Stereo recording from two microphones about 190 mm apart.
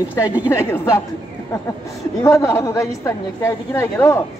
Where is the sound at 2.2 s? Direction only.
15° left (ahead or behind).